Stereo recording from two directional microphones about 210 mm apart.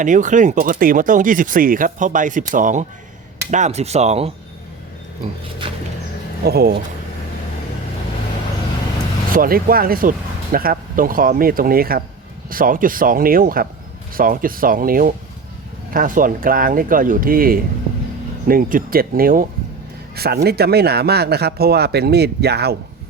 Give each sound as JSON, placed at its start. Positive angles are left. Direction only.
{"t": 0.0, "sound": "speech", "side_deg": -35}
{"t": 5.6, "sound": "a sound", "side_deg": -25}
{"t": 6.4, "sound": "speech", "side_deg": -50}
{"t": 9.3, "sound": "speech", "side_deg": -45}